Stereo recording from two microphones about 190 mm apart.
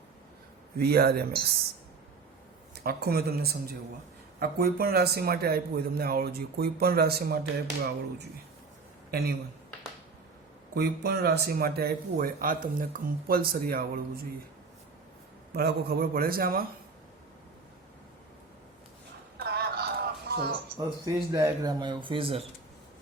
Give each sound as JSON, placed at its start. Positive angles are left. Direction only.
{"t": 0.8, "sound": "speech", "side_deg": -55}
{"t": 2.7, "sound": "speech", "side_deg": -55}
{"t": 10.8, "sound": "speech", "side_deg": -60}
{"t": 15.5, "sound": "speech", "side_deg": -55}
{"t": 19.4, "sound": "a sound", "side_deg": -55}
{"t": 20.7, "sound": "speech", "side_deg": -20}